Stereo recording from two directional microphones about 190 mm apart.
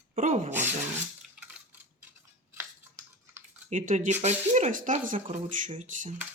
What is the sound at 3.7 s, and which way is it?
Speech, 40° right (ahead or behind).